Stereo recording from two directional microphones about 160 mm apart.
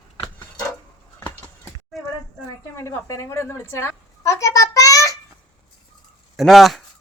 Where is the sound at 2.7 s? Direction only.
20° left (ahead or behind).